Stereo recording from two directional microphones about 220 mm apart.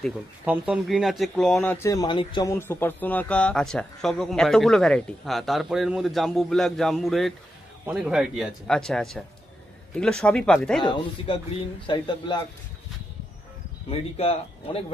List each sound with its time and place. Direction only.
0.0 s speech: centre (ahead or behind)
10.8 s speech: 20° left (ahead or behind)
13.8 s speech: 25° left (ahead or behind)